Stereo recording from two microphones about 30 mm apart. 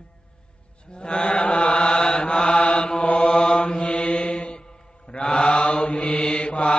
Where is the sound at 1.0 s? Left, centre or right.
Left.